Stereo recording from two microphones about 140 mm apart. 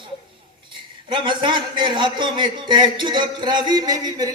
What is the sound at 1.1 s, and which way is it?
A man's voice, 35° right (ahead or behind).